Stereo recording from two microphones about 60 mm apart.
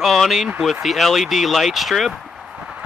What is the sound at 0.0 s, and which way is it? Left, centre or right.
Speech, centre.